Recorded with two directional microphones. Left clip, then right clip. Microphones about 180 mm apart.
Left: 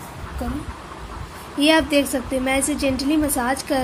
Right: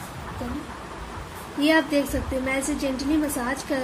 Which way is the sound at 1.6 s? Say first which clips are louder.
Left 4 dB; 50° left (ahead or behind).